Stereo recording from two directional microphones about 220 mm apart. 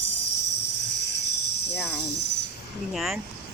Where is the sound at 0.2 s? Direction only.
90° left.